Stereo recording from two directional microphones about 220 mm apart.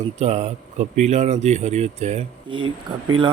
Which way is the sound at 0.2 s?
30° right (ahead or behind).